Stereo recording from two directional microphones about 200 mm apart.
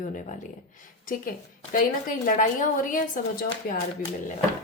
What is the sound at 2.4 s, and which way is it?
A woman's voice, 40° left (ahead or behind).